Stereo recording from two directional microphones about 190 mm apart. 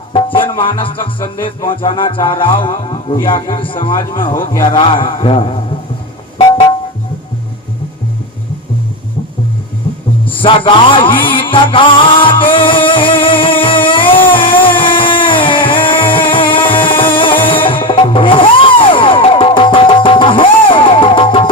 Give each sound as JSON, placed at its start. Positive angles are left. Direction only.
{"t": 0.1, "sound": "music", "side_deg": 25}
{"t": 6.4, "sound": "music", "side_deg": 25}
{"t": 9.8, "sound": "music", "side_deg": 25}